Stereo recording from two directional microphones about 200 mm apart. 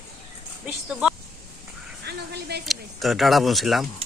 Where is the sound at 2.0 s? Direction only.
55° right (ahead or behind).